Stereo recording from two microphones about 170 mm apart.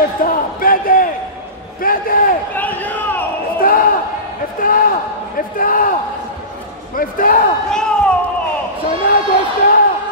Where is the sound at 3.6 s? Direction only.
55° left (ahead or behind).